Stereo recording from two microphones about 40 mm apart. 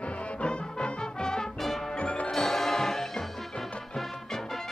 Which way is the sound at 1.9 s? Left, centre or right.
Left.